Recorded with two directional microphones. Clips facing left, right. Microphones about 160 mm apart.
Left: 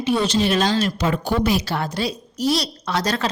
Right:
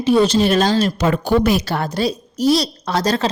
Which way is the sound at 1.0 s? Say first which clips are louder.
Right 5 dB; 55° right (ahead or behind).